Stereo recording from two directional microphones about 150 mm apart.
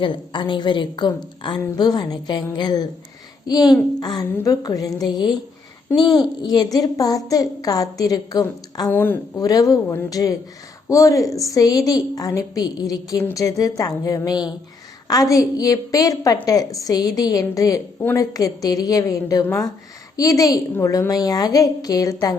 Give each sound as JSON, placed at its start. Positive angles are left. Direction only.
{"t": 0.0, "sound": "a woman's voice", "side_deg": 30}
{"t": 6.4, "sound": "a woman's voice", "side_deg": 30}
{"t": 8.9, "sound": "a woman's voice", "side_deg": 10}
{"t": 9.4, "sound": "a woman's voice", "side_deg": 25}